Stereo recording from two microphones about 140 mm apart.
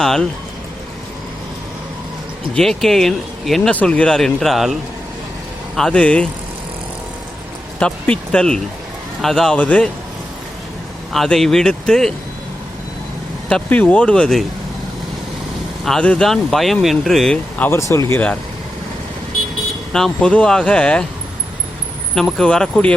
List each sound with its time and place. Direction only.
0.0 s speech: 5° left (ahead or behind)
2.6 s speech: 5° left (ahead or behind)
7.8 s speech: 5° left (ahead or behind)
11.1 s speech: centre (ahead or behind)
13.5 s speech: 10° left (ahead or behind)
15.8 s speech: 5° left (ahead or behind)
17.7 s speech: 20° left (ahead or behind)
19.9 s speech: 5° left (ahead or behind)
22.1 s speech: 5° left (ahead or behind)